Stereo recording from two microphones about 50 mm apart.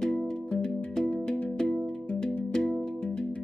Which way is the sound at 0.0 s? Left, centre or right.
Centre.